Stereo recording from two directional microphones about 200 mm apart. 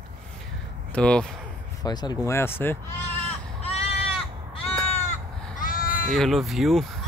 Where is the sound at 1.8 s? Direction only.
20° left (ahead or behind).